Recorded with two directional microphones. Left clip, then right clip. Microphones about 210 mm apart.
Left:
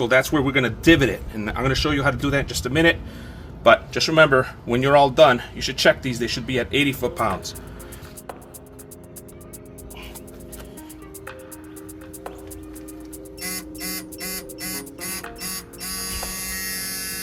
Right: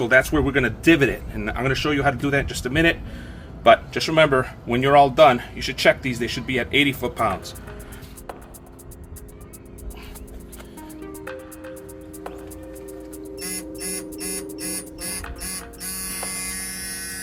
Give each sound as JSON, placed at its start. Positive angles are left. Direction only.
{"t": 0.0, "sound": "speech", "side_deg": 30}
{"t": 16.2, "sound": "electric shaver", "side_deg": 0}